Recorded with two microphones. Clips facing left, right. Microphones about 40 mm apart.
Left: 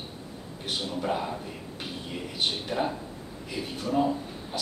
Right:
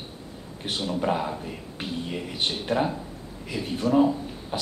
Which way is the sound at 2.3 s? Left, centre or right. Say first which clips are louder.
Right 3 dB; right.